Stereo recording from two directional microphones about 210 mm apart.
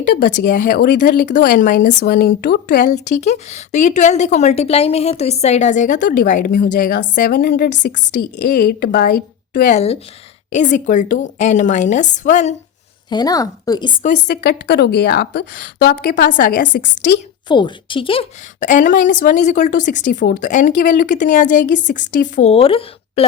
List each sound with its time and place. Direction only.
0.0 s speech: 40° left (ahead or behind)
2.9 s speech: 35° left (ahead or behind)
13.1 s speech: 20° left (ahead or behind)
14.3 s speech: 50° left (ahead or behind)
17.5 s speech: 25° left (ahead or behind)
18.6 s speech: 40° left (ahead or behind)